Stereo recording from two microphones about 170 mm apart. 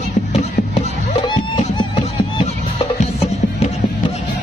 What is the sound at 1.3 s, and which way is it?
Music, 25° left (ahead or behind).